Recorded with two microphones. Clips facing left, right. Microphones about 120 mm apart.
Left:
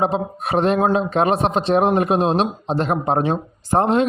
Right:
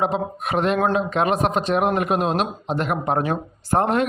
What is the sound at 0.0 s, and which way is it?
Speech, 30° left (ahead or behind).